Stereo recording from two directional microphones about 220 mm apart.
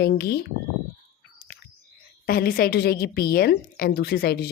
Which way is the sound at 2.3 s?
40° left (ahead or behind).